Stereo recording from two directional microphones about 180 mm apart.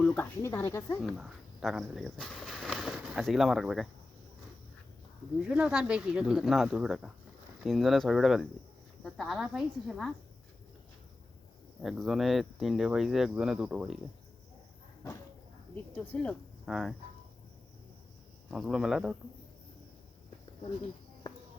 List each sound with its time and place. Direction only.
0.0 s a sound: 5° left (ahead or behind)
0.4 s speech: 15° left (ahead or behind)
1.0 s speech: centre (ahead or behind)
5.4 s speech: 5° right (ahead or behind)
11.8 s speech: centre (ahead or behind)
15.7 s speech: 5° left (ahead or behind)
18.5 s speech: centre (ahead or behind)